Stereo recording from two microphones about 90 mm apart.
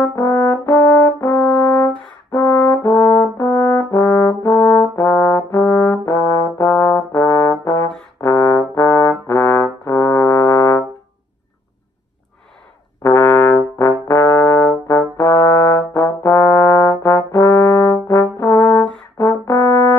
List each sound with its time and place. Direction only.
0.0 s brass instrument: 30° left (ahead or behind)
13.0 s brass instrument: 30° left (ahead or behind)